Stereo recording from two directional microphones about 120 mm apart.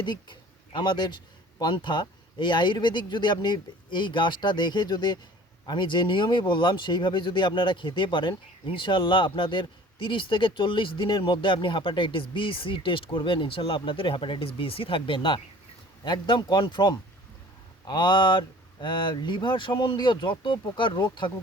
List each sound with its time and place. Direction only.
0.0 s speech: 40° left (ahead or behind)